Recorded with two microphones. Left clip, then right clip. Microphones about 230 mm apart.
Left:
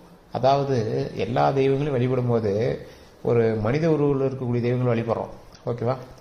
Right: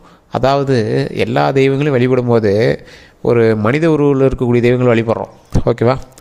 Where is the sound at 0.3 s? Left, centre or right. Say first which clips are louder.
Right 7 dB; right.